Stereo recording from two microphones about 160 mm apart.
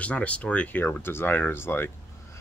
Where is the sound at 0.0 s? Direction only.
10° left (ahead or behind).